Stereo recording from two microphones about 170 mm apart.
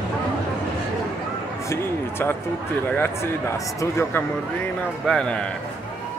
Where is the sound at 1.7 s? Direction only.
15° left (ahead or behind).